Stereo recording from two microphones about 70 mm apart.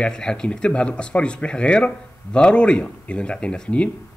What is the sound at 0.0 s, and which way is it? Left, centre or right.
Speech, centre.